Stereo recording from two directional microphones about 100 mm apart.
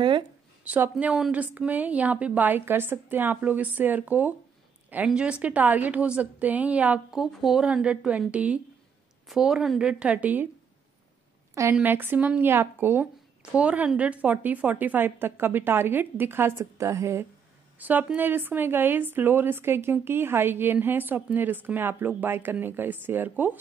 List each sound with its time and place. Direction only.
0.7 s a woman's voice: 20° right (ahead or behind)
11.8 s speech: 20° right (ahead or behind)
17.7 s speech: 15° right (ahead or behind)